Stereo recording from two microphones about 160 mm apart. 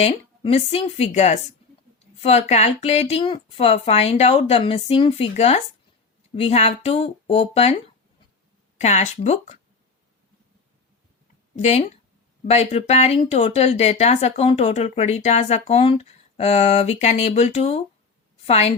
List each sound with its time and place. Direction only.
0.0 s speech: 40° left (ahead or behind)
8.8 s speech: 45° left (ahead or behind)
11.5 s speech: 45° left (ahead or behind)